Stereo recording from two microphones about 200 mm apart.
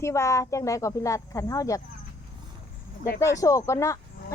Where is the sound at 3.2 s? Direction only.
15° left (ahead or behind).